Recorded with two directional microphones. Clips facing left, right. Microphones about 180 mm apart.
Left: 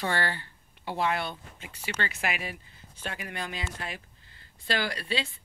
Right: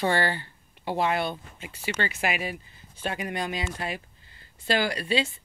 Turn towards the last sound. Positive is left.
turn(degrees=-15)  # may be behind; listen again after turning